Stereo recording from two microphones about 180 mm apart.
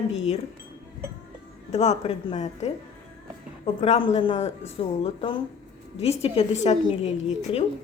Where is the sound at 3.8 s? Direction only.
35° left (ahead or behind).